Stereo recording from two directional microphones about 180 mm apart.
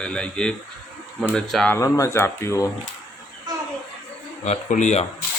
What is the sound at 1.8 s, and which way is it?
Speech, 15° left (ahead or behind).